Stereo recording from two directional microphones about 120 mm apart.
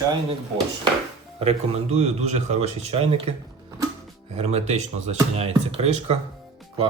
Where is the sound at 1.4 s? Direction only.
60° right (ahead or behind).